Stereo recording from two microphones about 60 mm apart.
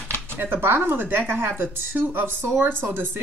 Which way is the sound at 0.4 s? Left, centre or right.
Right.